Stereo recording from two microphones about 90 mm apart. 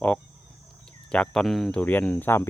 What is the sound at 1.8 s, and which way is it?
Speech, 20° left (ahead or behind).